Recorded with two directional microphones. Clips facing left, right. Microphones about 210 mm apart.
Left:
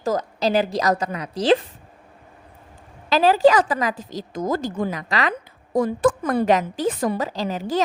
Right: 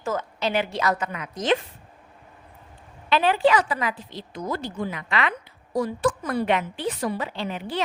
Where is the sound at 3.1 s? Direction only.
40° left (ahead or behind).